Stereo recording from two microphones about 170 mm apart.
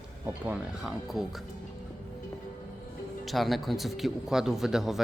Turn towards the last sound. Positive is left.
turn(degrees=-5)  # may be behind; listen again after turning